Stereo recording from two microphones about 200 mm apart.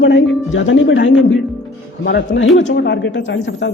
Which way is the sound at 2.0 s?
55° left (ahead or behind).